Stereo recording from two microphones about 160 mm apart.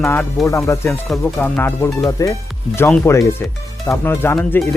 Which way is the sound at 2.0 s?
20° left (ahead or behind).